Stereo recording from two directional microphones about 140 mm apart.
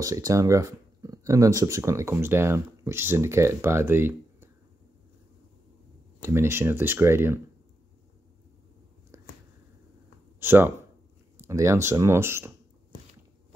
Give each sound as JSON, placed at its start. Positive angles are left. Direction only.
{"t": 0.0, "sound": "speech", "side_deg": -25}
{"t": 6.2, "sound": "speech", "side_deg": -20}
{"t": 9.1, "sound": "a sound", "side_deg": -20}
{"t": 10.4, "sound": "speech", "side_deg": -15}